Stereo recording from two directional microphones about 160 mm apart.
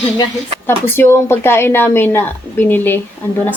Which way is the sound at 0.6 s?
15° left (ahead or behind).